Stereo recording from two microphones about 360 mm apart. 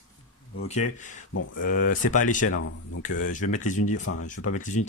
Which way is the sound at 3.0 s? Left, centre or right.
Left.